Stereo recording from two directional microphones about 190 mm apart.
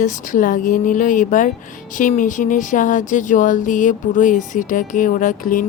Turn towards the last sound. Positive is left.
turn(degrees=45)  # may be behind; listen again after turning